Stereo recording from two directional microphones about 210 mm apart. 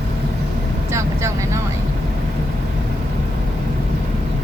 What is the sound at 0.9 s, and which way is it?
Vehicle, 15° right (ahead or behind).